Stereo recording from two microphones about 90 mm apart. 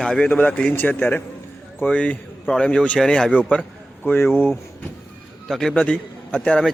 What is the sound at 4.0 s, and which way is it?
Speech, 25° left (ahead or behind).